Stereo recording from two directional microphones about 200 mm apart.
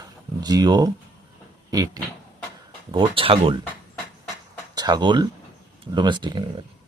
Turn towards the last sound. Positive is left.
turn(degrees=-20)  # may be behind; listen again after turning